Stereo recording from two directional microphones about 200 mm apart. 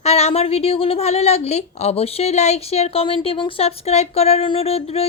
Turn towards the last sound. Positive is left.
turn(degrees=30)  # may be behind; listen again after turning